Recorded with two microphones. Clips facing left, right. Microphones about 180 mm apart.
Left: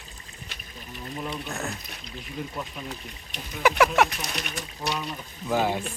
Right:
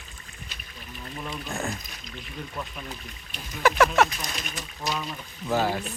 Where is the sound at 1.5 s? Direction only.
15° right (ahead or behind).